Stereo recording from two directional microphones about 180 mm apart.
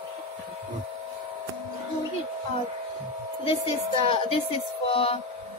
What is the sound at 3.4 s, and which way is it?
Speech, 30° left (ahead or behind).